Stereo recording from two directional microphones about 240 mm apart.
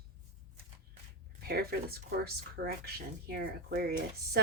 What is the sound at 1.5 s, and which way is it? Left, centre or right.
A woman's voice, right.